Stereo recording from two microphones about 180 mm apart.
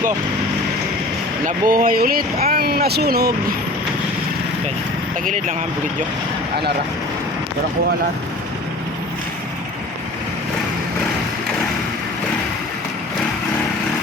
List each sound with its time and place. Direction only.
1.5 s speech: 50° right (ahead or behind)